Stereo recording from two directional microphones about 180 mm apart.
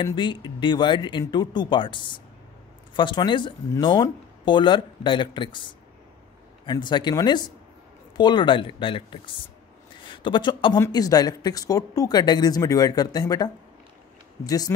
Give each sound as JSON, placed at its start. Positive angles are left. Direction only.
{"t": 0.0, "sound": "speech", "side_deg": 25}